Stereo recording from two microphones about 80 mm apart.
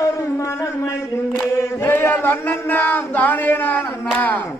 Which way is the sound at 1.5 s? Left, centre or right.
Left.